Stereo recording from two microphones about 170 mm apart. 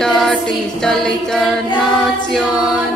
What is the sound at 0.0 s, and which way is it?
A capella, 5° left (ahead or behind).